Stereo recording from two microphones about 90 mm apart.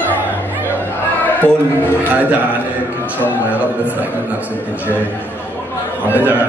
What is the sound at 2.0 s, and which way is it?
A man's voice, 15° right (ahead or behind).